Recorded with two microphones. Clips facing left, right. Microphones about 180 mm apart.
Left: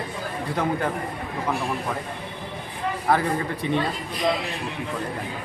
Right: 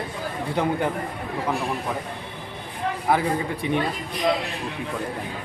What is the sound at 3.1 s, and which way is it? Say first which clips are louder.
Speech: even; 15° right (ahead or behind).